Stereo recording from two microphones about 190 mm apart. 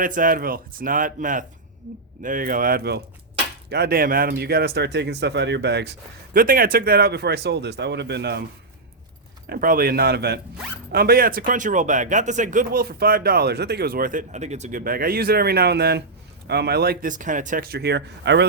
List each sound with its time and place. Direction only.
0.0 s speech: 45° right (ahead or behind)
9.5 s speech: 50° right (ahead or behind); by 18.4 s 65° right (ahead or behind)